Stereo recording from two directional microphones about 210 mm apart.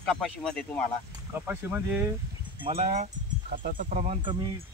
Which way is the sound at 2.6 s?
30° right (ahead or behind).